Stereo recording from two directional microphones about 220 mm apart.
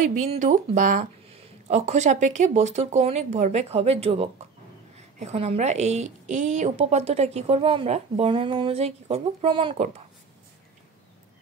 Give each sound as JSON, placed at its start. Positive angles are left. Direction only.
{"t": 0.1, "sound": "a woman's voice", "side_deg": -35}